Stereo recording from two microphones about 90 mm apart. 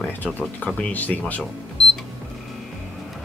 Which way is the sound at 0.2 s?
20° left (ahead or behind).